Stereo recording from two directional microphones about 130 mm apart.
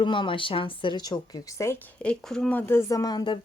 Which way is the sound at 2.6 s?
20° left (ahead or behind).